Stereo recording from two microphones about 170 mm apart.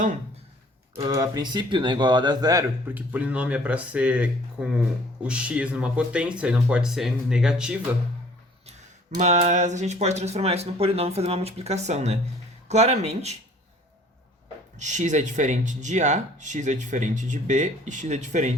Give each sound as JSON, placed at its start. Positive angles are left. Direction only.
{"t": 0.9, "sound": "speech", "side_deg": -20}
{"t": 8.6, "sound": "speech", "side_deg": -45}
{"t": 14.8, "sound": "speech", "side_deg": -45}